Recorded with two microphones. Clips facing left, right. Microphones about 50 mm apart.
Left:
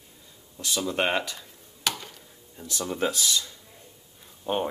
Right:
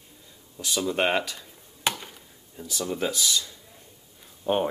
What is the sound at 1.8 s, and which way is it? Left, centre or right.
Chop, right.